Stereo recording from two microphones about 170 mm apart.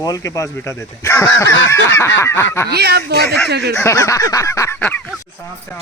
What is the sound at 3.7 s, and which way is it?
Speech, 15° left (ahead or behind).